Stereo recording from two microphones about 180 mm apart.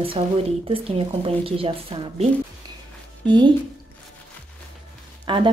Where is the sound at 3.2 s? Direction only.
5° left (ahead or behind).